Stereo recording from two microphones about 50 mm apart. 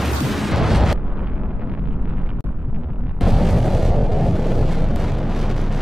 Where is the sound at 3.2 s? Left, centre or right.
Centre.